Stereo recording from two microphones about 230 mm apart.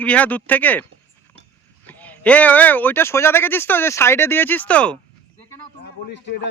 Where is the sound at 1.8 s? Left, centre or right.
Centre.